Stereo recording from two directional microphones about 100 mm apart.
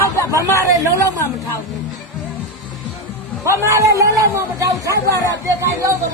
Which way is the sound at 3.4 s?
30° right (ahead or behind).